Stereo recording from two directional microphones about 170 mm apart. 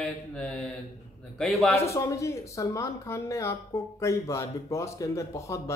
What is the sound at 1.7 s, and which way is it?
Speech, 15° left (ahead or behind).